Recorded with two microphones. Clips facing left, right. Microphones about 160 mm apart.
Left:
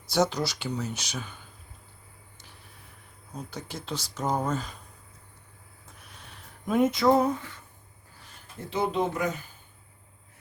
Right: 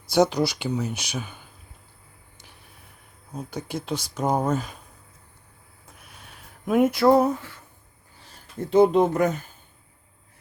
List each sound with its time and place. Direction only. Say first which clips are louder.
0.1 s speech: right 5 dB; 15° right (ahead or behind)
3.3 s speech: right 6 dB; 10° right (ahead or behind)
6.7 s speech: right 4 dB; 5° right (ahead or behind)
8.7 s speech: right 10 dB; 50° right (ahead or behind)